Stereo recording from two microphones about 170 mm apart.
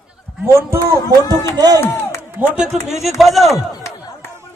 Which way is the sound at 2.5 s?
5° right (ahead or behind).